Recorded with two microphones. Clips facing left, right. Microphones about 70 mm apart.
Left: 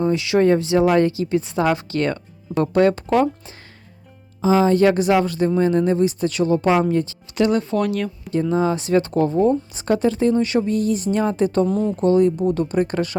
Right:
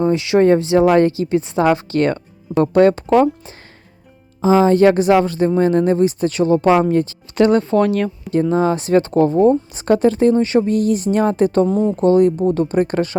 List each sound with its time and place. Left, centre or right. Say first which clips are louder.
0.0 s speech: right 3 dB; right
5.5 s speech: right 3 dB; right
10.7 s speech: right 4 dB; right
11.7 s speech: right 4 dB; right
11.9 s speech: right 3 dB; right